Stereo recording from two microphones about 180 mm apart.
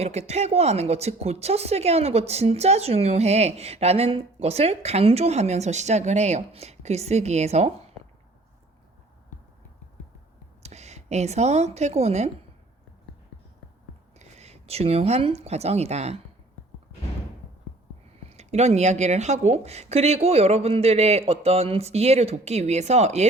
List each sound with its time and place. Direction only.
0.0 s speech: 35° right (ahead or behind)
10.6 s a woman's voice: 40° right (ahead or behind)
14.2 s speech: 35° right (ahead or behind)
18.3 s speech: 35° right (ahead or behind)